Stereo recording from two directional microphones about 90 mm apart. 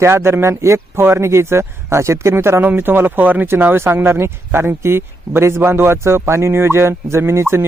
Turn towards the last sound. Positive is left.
turn(degrees=-30)  # may be behind; listen again after turning